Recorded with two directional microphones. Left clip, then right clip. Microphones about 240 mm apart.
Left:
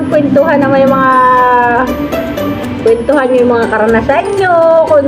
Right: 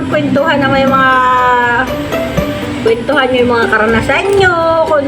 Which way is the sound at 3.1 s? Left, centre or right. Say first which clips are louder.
Even; right.